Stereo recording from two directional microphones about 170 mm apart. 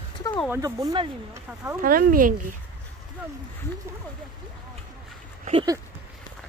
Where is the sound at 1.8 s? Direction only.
55° right (ahead or behind).